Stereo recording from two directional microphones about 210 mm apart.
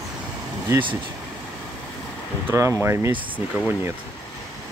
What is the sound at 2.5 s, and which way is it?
Speech, 10° right (ahead or behind).